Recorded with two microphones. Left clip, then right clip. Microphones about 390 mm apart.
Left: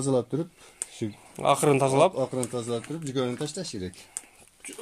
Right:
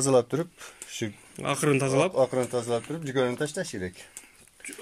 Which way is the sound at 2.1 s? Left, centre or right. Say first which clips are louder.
Right 5 dB; right.